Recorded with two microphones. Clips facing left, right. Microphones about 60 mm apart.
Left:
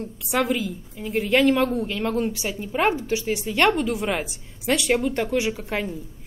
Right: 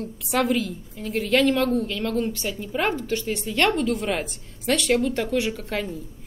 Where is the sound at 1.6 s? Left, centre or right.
Left.